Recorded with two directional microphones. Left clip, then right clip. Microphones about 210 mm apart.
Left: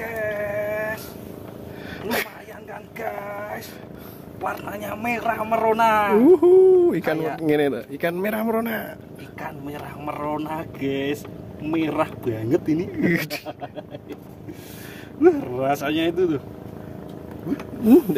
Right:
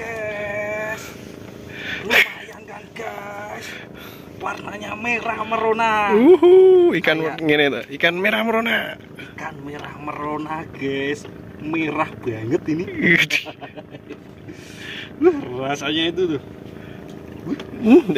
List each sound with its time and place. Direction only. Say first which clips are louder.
0.0 s a sound: even; 5° right (ahead or behind)
0.6 s a sound: even; 10° left (ahead or behind)
1.8 s dog: right 10 dB; 5° left (ahead or behind)
3.0 s a sound: left 1 dB; centre (ahead or behind)
4.4 s a man's voice: even; 10° left (ahead or behind)
10.0 s speech: right 1 dB; 20° left (ahead or behind)
13.0 s speech: right 8 dB; 5° left (ahead or behind)
15.2 s speech: left 1 dB; 20° left (ahead or behind)
17.8 s a man's voice: right 2 dB; 10° left (ahead or behind)